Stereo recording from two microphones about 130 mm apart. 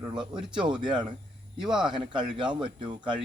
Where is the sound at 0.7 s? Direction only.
35° right (ahead or behind).